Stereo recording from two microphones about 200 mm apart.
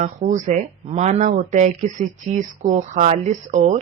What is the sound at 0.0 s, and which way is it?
Speech, 40° right (ahead or behind).